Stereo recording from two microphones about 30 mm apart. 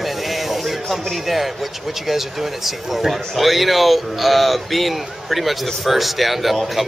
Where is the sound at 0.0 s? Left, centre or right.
Centre.